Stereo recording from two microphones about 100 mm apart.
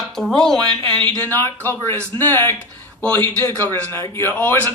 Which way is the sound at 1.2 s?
25° left (ahead or behind).